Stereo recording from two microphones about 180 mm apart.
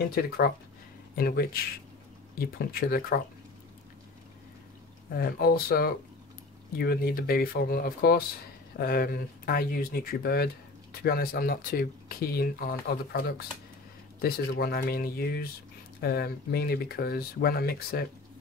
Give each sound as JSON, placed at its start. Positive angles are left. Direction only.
{"t": 1.1, "sound": "speech", "side_deg": 60}
{"t": 5.1, "sound": "speech", "side_deg": 55}